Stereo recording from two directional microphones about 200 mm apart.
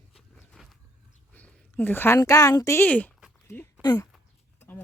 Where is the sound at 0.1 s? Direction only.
Centre (ahead or behind).